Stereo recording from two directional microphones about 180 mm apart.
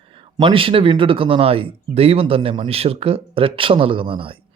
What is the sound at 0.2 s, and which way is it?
Speech, 30° right (ahead or behind).